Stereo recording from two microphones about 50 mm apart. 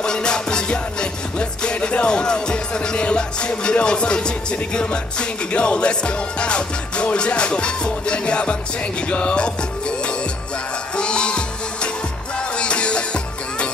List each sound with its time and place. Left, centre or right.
0.0 s music: centre